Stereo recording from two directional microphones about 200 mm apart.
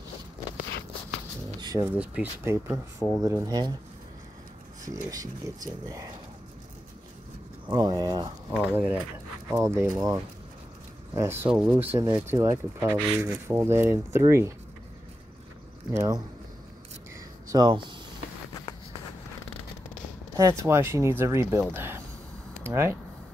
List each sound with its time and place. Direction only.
1.6 s a sound: 20° right (ahead or behind)
2.0 s speech: 10° right (ahead or behind)
4.9 s speech: 20° right (ahead or behind)
7.7 s speech: 20° right (ahead or behind)
8.5 s speech: 10° right (ahead or behind)
15.9 s speech: 15° right (ahead or behind)
17.5 s speech: 20° right (ahead or behind)
20.3 s speech: 15° right (ahead or behind)